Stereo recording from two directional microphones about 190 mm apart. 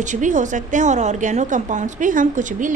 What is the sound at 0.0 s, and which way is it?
A woman's voice, 40° right (ahead or behind).